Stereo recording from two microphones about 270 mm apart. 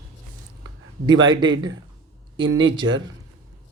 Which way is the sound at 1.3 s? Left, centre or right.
Centre.